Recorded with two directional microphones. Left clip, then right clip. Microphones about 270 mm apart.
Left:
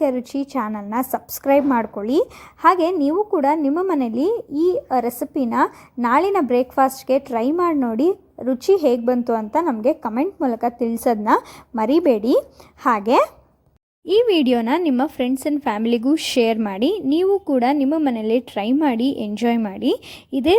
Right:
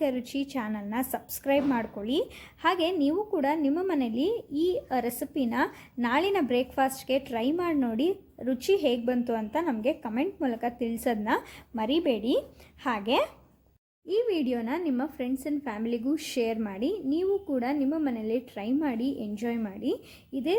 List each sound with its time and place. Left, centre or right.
0.0 s a woman's voice: centre; by 20.6 s left